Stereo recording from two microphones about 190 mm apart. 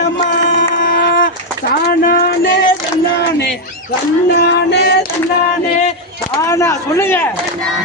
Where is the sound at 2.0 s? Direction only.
50° left (ahead or behind).